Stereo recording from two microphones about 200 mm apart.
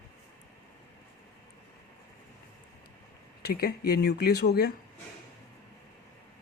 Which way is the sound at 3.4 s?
55° left (ahead or behind).